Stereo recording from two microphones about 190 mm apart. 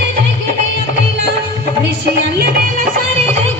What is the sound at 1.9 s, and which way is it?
Music, 60° right (ahead or behind).